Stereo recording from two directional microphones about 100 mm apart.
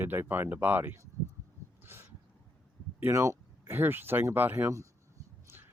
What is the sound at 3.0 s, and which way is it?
Speech, 30° right (ahead or behind).